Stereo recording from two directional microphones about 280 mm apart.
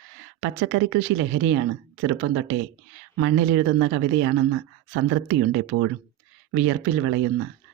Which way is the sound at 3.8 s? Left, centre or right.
Right.